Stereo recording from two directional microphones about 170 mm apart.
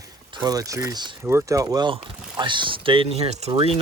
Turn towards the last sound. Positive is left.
turn(degrees=-35)  # may be behind; listen again after turning